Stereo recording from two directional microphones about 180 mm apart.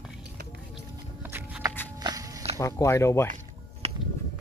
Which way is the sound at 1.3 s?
10° right (ahead or behind).